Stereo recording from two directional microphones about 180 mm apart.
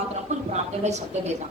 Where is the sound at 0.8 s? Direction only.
40° right (ahead or behind).